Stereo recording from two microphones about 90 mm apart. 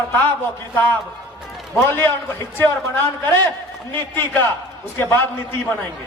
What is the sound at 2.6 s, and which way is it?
Speech, 20° left (ahead or behind).